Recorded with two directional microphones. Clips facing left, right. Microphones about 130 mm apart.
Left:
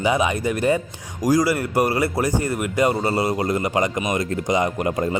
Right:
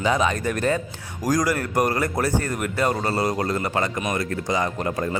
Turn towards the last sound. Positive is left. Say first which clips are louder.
# left 3 dB
turn(degrees=15)  # may be behind; listen again after turning